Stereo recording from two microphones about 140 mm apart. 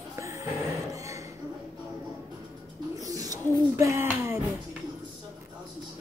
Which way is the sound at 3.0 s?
25° right (ahead or behind).